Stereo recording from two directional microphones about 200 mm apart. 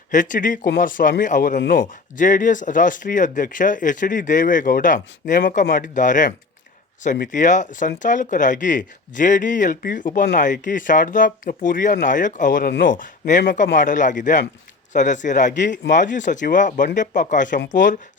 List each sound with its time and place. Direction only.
0.1 s a man's voice: 40° left (ahead or behind)